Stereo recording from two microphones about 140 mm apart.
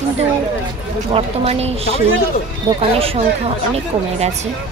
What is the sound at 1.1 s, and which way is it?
Speech, 45° right (ahead or behind).